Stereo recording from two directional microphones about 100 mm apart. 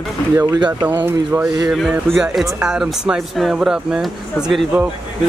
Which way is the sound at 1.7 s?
5° right (ahead or behind).